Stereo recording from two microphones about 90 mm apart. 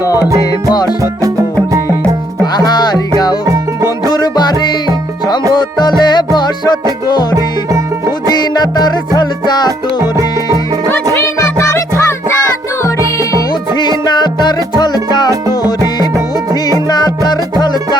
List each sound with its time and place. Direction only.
0.0 s music: 40° left (ahead or behind)
1.7 s music: 35° right (ahead or behind)
2.4 s music: 50° left (ahead or behind)
4.1 s music: 50° left (ahead or behind)
8.3 s music: 50° left (ahead or behind)
10.0 s music: 35° right (ahead or behind)
11.1 s music: 30° left (ahead or behind)
13.7 s music: 55° left (ahead or behind)
16.9 s music: 50° left (ahead or behind)